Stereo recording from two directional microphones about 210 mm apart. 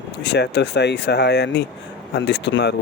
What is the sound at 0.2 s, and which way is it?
Speech, 55° left (ahead or behind).